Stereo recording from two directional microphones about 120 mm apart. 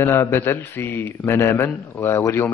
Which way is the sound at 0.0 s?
20° left (ahead or behind).